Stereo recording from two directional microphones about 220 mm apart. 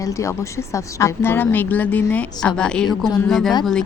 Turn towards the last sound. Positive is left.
turn(degrees=0)  # may be behind; listen again after turning